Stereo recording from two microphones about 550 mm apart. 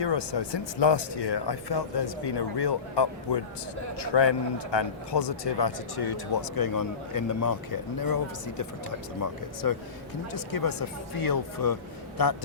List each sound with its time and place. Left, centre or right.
0.0 s a man's voice: left